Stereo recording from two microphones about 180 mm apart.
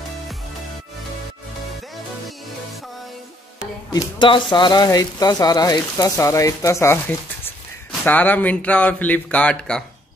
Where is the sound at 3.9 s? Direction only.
25° left (ahead or behind); by 9.9 s 5° left (ahead or behind).